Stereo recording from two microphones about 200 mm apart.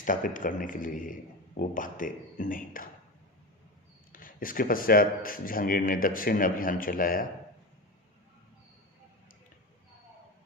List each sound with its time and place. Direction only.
0.0 s speech: 40° left (ahead or behind)
4.1 s speech: 45° left (ahead or behind)